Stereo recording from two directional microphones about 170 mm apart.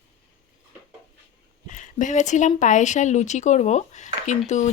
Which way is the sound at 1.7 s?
50° left (ahead or behind).